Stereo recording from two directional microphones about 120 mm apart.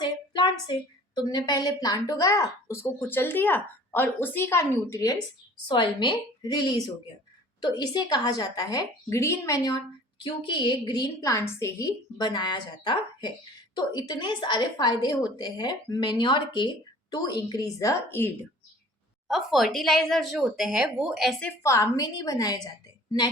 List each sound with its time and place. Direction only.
0.0 s a woman's voice: 40° left (ahead or behind)
5.6 s a woman's voice: 40° left (ahead or behind)
10.2 s a woman's voice: 45° left (ahead or behind); by 18.3 s 20° left (ahead or behind)
19.3 s speech: centre (ahead or behind)
21.4 s a woman's voice: 25° left (ahead or behind)